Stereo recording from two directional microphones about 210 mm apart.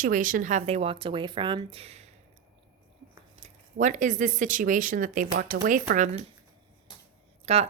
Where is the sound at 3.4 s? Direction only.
35° right (ahead or behind).